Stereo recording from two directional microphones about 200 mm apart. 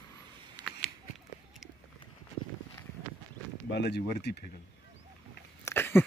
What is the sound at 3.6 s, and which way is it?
Speech, 55° left (ahead or behind).